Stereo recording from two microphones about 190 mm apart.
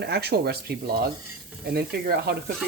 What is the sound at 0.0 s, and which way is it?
Speech, 60° right (ahead or behind).